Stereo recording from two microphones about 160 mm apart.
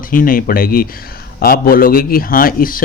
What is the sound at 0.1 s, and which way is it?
A man's voice, 60° left (ahead or behind).